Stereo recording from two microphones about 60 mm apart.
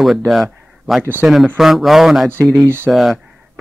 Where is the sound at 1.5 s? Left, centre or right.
Centre.